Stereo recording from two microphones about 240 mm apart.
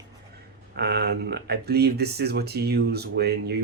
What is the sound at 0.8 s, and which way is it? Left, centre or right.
Speech, right.